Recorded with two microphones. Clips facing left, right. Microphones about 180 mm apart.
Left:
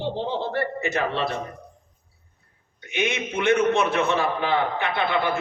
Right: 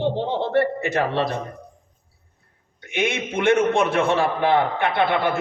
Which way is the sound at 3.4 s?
50° right (ahead or behind).